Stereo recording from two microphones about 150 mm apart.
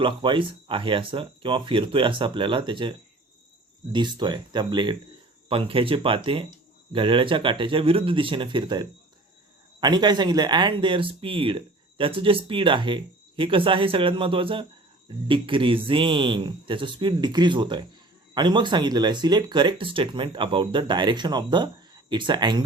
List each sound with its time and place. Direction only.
0.0 s speech: 35° right (ahead or behind)